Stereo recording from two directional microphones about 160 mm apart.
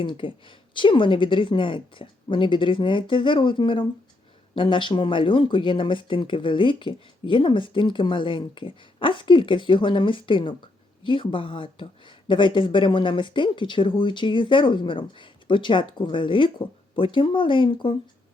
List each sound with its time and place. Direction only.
0.0 s speech: 30° left (ahead or behind)